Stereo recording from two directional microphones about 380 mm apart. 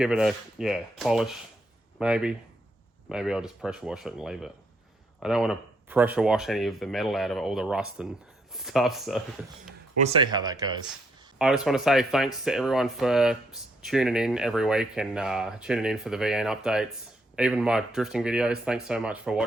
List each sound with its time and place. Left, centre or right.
0.0 s speech: centre
10.0 s speech: centre